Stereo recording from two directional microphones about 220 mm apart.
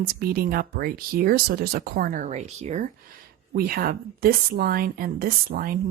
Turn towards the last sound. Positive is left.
turn(degrees=-40)  # may be behind; listen again after turning